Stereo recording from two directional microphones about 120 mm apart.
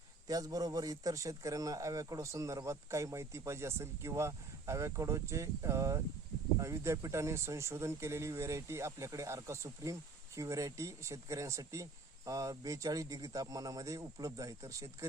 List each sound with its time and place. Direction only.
0.3 s speech: 30° right (ahead or behind)